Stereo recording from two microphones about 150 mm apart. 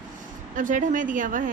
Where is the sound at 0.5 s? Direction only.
60° right (ahead or behind).